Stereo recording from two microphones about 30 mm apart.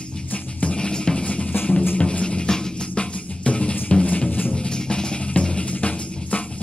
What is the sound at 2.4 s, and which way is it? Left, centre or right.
Music, left.